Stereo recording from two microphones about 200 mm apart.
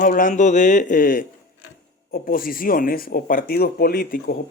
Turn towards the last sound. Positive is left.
turn(degrees=45)  # may be behind; listen again after turning